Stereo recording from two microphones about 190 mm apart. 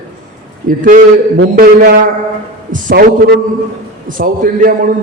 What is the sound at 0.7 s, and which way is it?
A man's voice, 45° right (ahead or behind).